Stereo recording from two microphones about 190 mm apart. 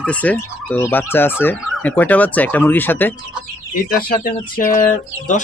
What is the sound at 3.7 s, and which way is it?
Speech, 50° left (ahead or behind).